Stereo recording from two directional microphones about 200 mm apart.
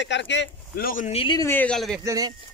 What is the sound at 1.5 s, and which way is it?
Speech, 5° left (ahead or behind).